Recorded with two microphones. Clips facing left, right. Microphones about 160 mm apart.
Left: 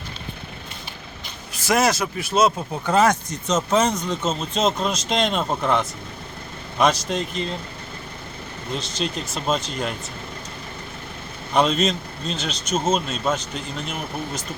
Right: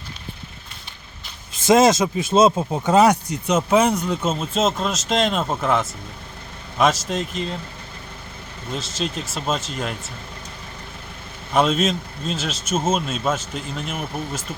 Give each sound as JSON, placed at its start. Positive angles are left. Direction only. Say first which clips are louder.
{"t": 1.5, "sound": "speech", "louder": "right 6 dB", "side_deg": -20}
{"t": 8.7, "sound": "speech", "louder": "even", "side_deg": 0}
{"t": 11.5, "sound": "speech", "louder": "right 1 dB", "side_deg": -5}